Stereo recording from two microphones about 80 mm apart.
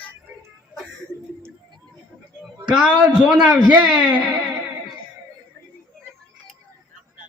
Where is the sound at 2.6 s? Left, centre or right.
Centre.